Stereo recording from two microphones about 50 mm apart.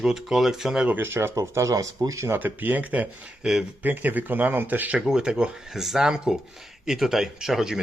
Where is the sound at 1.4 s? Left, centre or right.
Right.